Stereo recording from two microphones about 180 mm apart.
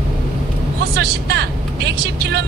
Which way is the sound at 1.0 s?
65° right (ahead or behind).